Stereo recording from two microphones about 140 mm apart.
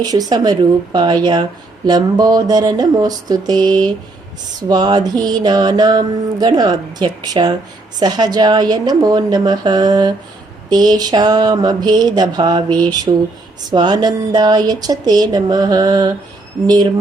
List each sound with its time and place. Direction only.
0.0 s mantra: 30° right (ahead or behind)